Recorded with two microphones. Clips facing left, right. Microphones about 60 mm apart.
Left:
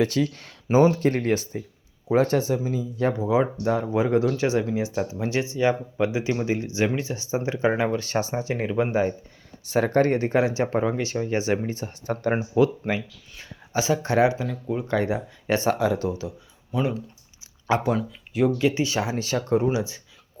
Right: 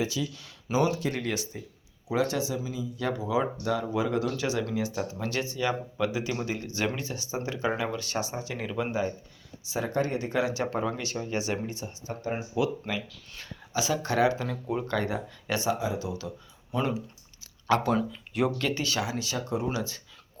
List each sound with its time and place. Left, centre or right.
0.0 s speech: left
9.6 s speech: left
12.0 s speech: left
12.5 s speech: left
14.4 s speech: centre
14.8 s speech: left
16.2 s speech: centre
16.7 s speech: centre
17.7 s speech: centre
18.6 s speech: left
19.6 s speech: centre